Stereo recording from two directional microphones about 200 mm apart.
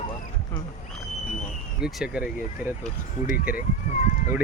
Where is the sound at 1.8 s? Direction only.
5° right (ahead or behind).